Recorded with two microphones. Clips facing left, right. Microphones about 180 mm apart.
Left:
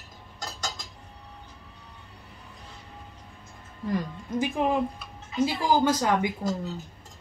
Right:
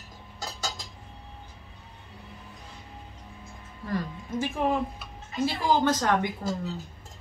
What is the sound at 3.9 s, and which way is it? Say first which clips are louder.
A woman's voice: left 1 dB; 15° left (ahead or behind).